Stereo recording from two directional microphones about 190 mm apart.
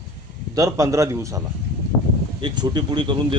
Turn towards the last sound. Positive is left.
turn(degrees=-25)  # may be behind; listen again after turning